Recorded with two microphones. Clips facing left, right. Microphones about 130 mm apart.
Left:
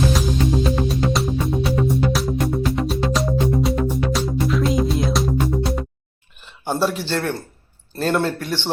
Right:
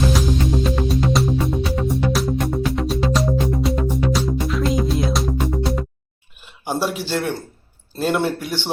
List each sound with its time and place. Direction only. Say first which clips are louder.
0.1 s music: even; centre (ahead or behind)
6.7 s speech: left 1 dB; 5° right (ahead or behind)